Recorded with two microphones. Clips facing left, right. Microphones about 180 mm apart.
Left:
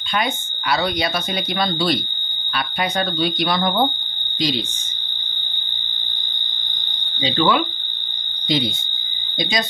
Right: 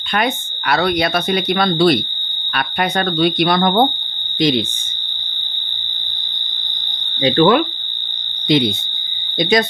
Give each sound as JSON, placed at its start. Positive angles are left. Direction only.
{"t": 0.1, "sound": "speech", "side_deg": -60}
{"t": 7.2, "sound": "speech", "side_deg": -55}